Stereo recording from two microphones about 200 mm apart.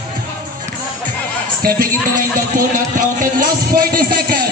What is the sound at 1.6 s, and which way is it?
Speech, 50° right (ahead or behind).